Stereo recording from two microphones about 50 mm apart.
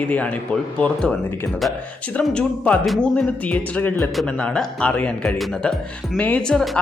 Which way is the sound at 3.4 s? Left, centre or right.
Left.